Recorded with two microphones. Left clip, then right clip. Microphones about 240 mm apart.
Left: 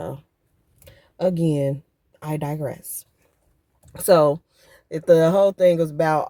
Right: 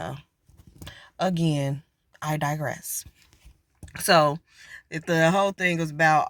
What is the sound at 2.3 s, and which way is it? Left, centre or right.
Speech, right.